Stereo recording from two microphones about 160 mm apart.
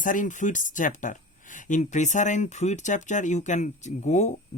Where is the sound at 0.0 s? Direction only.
55° left (ahead or behind).